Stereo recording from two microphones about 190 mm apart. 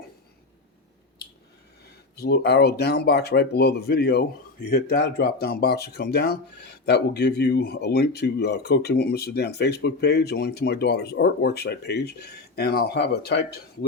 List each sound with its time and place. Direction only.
2.1 s speech: 55° left (ahead or behind)